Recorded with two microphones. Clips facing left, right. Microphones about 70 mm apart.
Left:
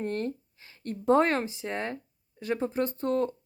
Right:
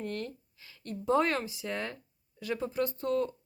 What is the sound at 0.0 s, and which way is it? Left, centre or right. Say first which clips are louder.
A woman's voice: left 6 dB; left.